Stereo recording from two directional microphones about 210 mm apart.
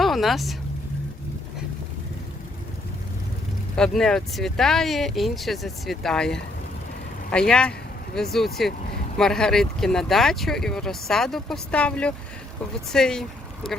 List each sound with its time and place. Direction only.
0.0 s vehicle: centre (ahead or behind)
3.8 s speech: 5° left (ahead or behind)